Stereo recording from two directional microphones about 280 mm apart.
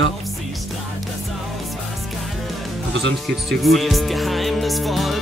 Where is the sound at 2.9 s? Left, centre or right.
Right.